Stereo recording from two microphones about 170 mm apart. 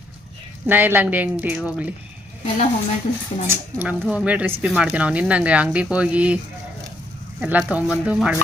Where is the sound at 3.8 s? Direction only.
5° right (ahead or behind).